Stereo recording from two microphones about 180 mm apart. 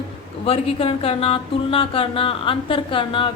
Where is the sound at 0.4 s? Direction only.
35° left (ahead or behind).